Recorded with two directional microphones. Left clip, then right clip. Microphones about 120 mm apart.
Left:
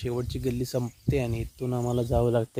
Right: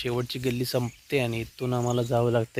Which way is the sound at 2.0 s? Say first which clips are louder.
Left 1 dB; 20° left (ahead or behind).